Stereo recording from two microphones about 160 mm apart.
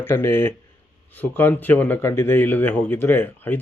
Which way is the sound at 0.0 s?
15° left (ahead or behind).